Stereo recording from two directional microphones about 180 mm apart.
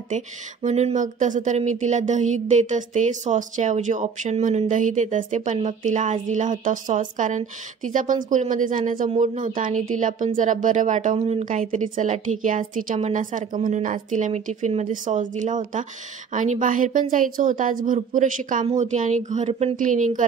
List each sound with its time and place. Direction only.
0.1 s a woman's voice: 40° right (ahead or behind)
11.1 s speech: 35° right (ahead or behind)
11.4 s a woman's voice: 45° right (ahead or behind)